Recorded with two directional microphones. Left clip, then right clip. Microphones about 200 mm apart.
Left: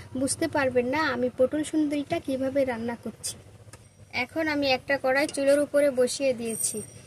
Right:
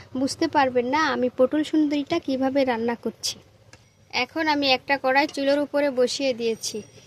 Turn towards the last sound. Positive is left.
turn(degrees=-40)  # may be behind; listen again after turning